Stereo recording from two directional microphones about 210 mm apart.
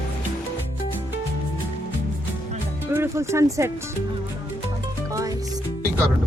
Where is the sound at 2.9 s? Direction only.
10° right (ahead or behind).